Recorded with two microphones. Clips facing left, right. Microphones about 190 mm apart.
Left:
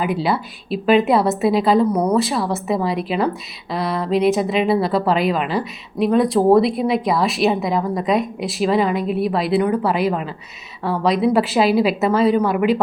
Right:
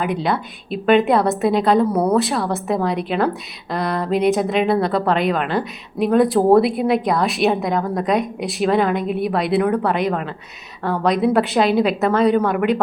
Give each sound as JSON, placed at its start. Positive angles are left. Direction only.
{"t": 0.0, "sound": "a woman's voice", "side_deg": 5}